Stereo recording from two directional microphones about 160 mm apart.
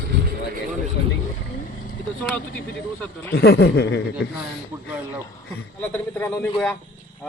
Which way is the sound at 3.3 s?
80° left.